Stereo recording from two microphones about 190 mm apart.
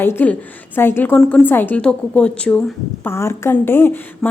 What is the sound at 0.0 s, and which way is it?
Speech, 10° left (ahead or behind).